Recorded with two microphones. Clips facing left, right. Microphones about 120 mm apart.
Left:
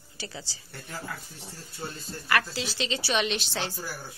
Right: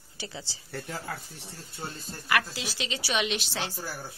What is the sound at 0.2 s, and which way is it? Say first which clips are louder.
Speech: even; 20° right (ahead or behind).